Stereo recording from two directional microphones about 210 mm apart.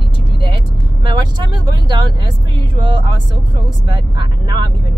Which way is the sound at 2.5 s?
20° right (ahead or behind).